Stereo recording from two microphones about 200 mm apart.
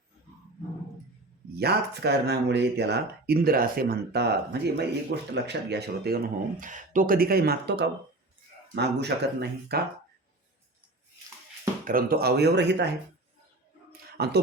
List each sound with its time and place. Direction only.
1.5 s speech: 55° right (ahead or behind)
6.6 s speech: 40° right (ahead or behind)
11.9 s speech: 45° right (ahead or behind)
14.2 s speech: 50° right (ahead or behind)